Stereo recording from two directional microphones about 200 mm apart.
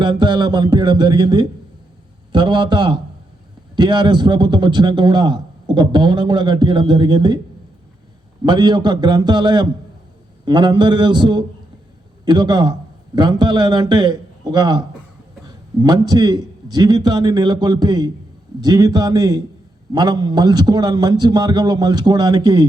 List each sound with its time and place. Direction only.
0.0 s a man's voice: 20° right (ahead or behind)
8.4 s a man's voice: 20° right (ahead or behind)